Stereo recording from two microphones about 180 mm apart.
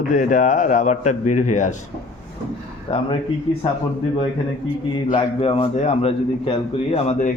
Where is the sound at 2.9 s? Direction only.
35° left (ahead or behind).